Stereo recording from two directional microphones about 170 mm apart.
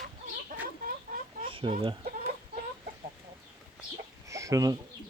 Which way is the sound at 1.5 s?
30° right (ahead or behind).